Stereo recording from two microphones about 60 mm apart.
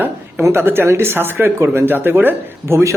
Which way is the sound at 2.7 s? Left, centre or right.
Right.